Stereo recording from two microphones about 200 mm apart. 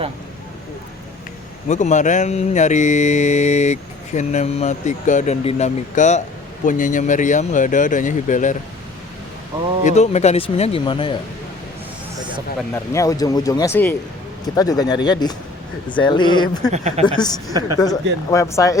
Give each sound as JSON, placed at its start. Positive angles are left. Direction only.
{"t": 1.6, "sound": "speech", "side_deg": 35}
{"t": 9.8, "sound": "speech", "side_deg": 35}
{"t": 12.7, "sound": "speech", "side_deg": 15}
{"t": 16.7, "sound": "speech", "side_deg": -35}
{"t": 17.1, "sound": "speech", "side_deg": 20}